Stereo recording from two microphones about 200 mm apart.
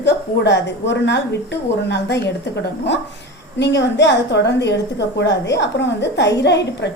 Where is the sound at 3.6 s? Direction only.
60° left (ahead or behind).